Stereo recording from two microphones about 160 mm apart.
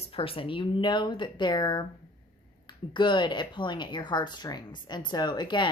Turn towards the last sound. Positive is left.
turn(degrees=30)  # may be behind; listen again after turning